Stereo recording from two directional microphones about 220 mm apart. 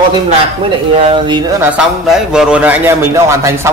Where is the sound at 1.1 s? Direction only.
20° right (ahead or behind).